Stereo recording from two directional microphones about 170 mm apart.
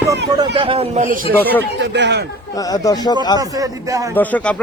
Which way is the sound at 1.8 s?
90° right.